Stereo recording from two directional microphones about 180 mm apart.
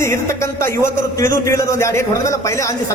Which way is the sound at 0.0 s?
15° left (ahead or behind).